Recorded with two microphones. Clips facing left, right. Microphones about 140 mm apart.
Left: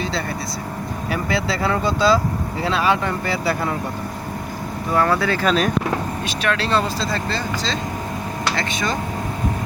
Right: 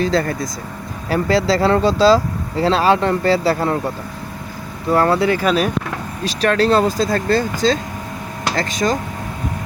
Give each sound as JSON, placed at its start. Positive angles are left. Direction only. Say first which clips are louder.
{"t": 0.0, "sound": "speech", "louder": "right 7 dB", "side_deg": -45}
{"t": 4.9, "sound": "speech", "louder": "right 3 dB", "side_deg": -30}
{"t": 5.3, "sound": "speech", "louder": "right 2 dB", "side_deg": -10}
{"t": 6.2, "sound": "speech", "louder": "right 12 dB", "side_deg": -40}